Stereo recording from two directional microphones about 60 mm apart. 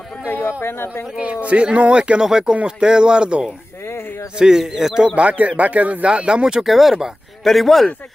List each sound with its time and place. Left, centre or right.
0.3 s speech: left
1.1 s speech: centre
3.8 s speech: left
4.4 s speech: centre